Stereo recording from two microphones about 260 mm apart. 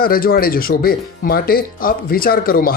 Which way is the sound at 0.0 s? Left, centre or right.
Left.